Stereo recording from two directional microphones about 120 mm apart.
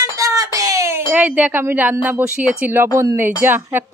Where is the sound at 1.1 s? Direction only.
10° right (ahead or behind).